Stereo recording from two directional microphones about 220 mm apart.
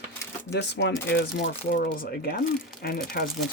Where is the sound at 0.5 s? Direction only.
50° left (ahead or behind).